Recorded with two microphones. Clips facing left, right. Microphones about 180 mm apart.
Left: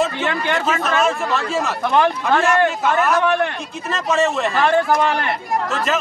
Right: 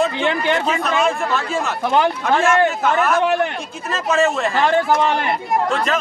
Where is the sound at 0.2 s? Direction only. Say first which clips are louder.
Right 3 dB; 15° right (ahead or behind).